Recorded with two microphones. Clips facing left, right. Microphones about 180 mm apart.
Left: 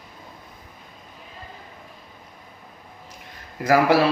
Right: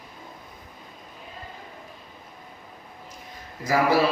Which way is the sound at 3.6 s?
70° left (ahead or behind).